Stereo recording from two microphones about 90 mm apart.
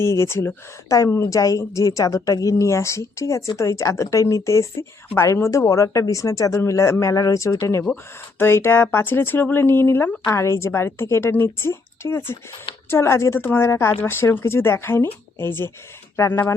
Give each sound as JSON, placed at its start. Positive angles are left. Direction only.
{"t": 0.1, "sound": "a woman's voice", "side_deg": 30}